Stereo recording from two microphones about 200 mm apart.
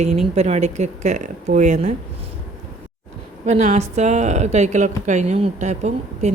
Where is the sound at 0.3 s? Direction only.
35° right (ahead or behind).